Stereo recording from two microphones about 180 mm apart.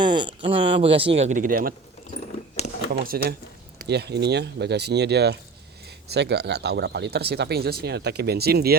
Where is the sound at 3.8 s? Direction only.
65° right (ahead or behind).